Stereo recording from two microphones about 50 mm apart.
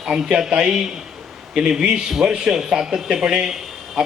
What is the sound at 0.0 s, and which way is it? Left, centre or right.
A man's voice, centre.